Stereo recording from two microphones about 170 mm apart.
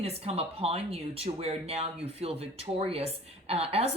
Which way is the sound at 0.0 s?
35° right (ahead or behind).